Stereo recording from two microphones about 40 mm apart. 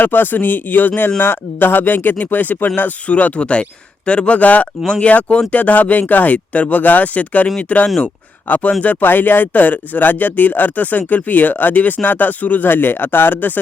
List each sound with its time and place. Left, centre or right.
0.0 s speech: left
1.2 s speech: left
3.1 s speech: left
4.4 s speech: left
9.0 s speech: left
12.6 s speech: left